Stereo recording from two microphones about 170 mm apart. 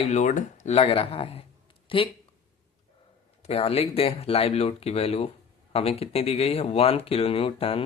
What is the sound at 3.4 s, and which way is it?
Speech, 35° left (ahead or behind).